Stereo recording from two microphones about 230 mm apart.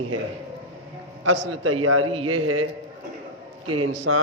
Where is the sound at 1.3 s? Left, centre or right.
Right.